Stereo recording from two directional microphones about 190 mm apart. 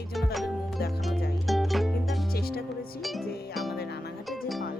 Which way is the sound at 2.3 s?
55° left (ahead or behind).